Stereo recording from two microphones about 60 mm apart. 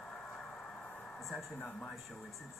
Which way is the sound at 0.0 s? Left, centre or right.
Centre.